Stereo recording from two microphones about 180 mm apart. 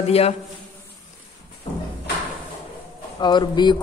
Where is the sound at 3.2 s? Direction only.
25° left (ahead or behind).